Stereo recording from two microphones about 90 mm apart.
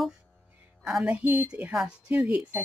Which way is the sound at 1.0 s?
20° right (ahead or behind).